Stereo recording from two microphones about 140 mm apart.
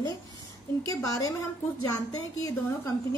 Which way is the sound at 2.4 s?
25° left (ahead or behind).